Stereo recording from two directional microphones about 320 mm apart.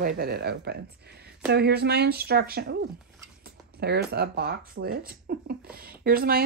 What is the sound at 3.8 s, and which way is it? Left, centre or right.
Speech, right.